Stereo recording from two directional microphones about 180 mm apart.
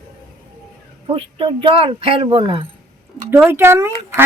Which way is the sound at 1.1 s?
30° right (ahead or behind).